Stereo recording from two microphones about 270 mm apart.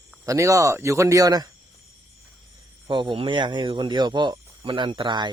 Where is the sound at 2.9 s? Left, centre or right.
Centre.